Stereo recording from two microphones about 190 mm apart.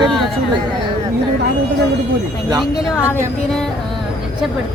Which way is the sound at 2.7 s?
15° left (ahead or behind).